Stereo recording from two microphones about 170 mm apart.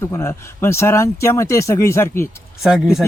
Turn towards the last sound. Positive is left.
turn(degrees=-5)  # may be behind; listen again after turning